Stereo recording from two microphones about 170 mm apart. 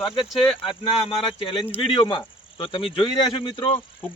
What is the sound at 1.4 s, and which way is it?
Speech, 30° left (ahead or behind).